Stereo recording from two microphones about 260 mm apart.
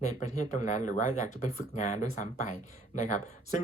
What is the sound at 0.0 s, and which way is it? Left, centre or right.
Speech, left.